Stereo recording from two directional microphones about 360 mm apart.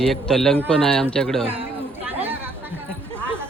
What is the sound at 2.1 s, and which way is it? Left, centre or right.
Chatter, centre.